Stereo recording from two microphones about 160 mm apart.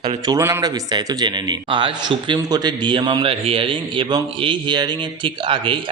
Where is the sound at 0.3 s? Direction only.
15° right (ahead or behind).